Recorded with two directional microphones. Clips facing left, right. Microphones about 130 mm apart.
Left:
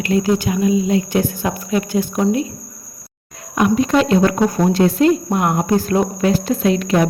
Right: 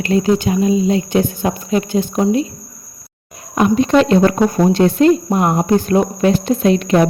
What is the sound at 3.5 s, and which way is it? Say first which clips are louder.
Speech: right 2 dB; 30° right (ahead or behind).